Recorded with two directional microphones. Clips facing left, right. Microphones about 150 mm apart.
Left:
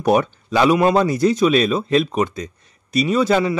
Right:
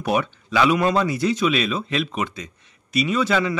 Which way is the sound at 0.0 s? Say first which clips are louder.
Left 6 dB; 40° left (ahead or behind).